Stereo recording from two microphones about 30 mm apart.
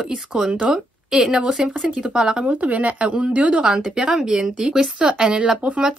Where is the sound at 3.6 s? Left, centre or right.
Right.